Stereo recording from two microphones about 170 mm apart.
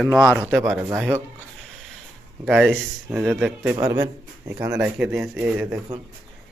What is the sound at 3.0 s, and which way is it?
Speech, 10° right (ahead or behind).